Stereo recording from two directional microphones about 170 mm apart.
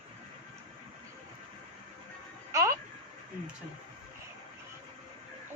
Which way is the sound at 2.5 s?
20° right (ahead or behind).